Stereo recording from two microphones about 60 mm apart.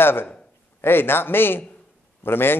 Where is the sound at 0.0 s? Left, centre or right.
Left.